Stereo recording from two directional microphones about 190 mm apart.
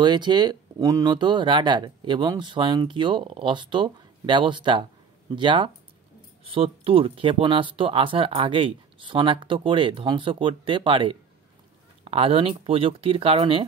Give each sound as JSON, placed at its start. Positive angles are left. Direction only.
{"t": 0.0, "sound": "speech", "side_deg": -25}